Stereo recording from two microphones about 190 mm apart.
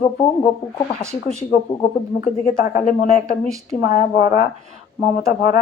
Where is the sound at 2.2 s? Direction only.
50° left (ahead or behind).